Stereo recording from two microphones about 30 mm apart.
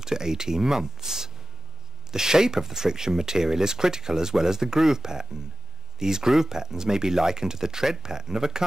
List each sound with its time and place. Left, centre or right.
0.0 s speech: centre